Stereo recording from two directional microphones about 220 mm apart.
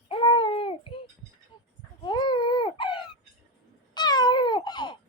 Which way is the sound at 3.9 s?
20° left (ahead or behind).